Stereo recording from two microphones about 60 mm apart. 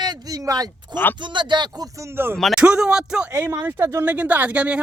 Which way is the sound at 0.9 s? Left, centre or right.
Left.